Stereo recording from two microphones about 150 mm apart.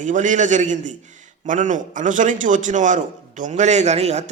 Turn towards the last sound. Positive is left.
turn(degrees=-50)  # may be behind; listen again after turning